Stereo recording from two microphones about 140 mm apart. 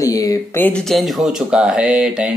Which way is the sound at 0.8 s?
Centre (ahead or behind).